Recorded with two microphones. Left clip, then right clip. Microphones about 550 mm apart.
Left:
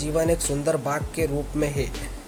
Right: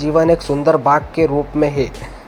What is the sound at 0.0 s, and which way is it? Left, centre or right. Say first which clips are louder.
Speech: right 10 dB; left.